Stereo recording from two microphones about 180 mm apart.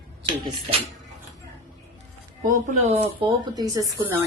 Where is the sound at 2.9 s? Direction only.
30° right (ahead or behind); by 4.2 s 15° right (ahead or behind).